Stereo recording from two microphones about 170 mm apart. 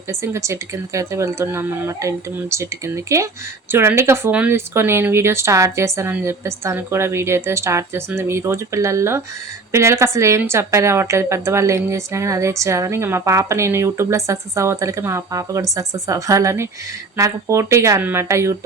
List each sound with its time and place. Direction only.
0.1 s a woman's voice: 15° right (ahead or behind)